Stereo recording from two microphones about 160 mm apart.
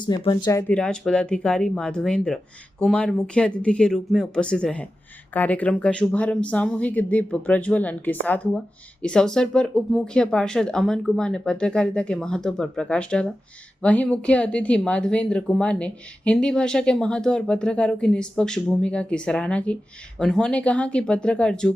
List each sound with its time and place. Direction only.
0.0 s speech: 30° left (ahead or behind)
0.7 s speech: 5° left (ahead or behind)